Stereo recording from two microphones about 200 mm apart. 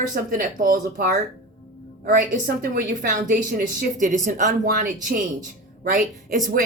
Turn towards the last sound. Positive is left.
turn(degrees=-45)  # may be behind; listen again after turning